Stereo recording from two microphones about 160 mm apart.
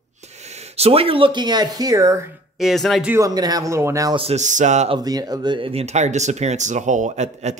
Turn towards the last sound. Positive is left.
turn(degrees=-45)  # may be behind; listen again after turning